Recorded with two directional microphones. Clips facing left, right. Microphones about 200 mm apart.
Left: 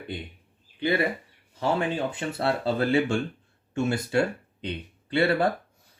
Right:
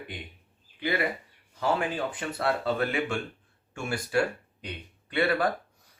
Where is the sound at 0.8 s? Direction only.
30° left (ahead or behind).